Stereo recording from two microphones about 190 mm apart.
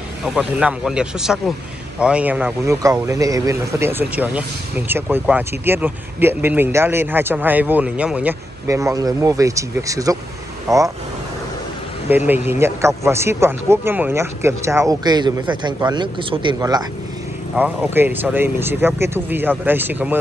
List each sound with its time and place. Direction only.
0.2 s speech: centre (ahead or behind); by 10.8 s 15° right (ahead or behind)
12.3 s speech: 10° right (ahead or behind)
17.6 s speech: 10° right (ahead or behind)